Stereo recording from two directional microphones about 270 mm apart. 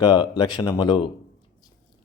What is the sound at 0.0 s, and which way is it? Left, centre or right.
Speech, centre.